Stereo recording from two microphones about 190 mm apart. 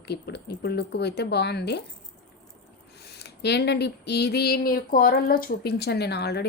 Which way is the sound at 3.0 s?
60° left (ahead or behind).